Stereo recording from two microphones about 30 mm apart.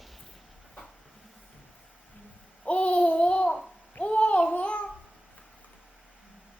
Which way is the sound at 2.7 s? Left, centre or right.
Left.